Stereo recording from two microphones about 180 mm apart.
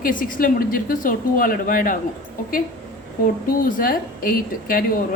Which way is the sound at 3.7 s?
50° left (ahead or behind).